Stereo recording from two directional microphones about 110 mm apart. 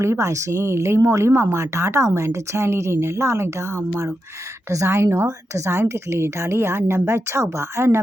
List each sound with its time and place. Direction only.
0.0 s speech: 25° right (ahead or behind)